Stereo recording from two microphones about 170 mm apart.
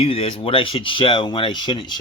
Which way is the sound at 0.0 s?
30° left (ahead or behind).